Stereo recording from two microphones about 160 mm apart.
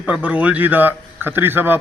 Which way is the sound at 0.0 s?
10° right (ahead or behind).